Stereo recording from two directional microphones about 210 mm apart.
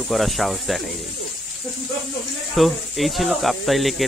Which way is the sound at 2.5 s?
Centre (ahead or behind).